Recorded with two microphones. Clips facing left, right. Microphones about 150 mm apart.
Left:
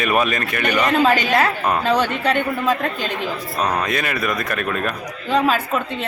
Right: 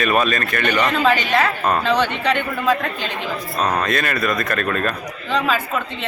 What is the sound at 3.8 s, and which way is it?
A man's voice, 10° left (ahead or behind).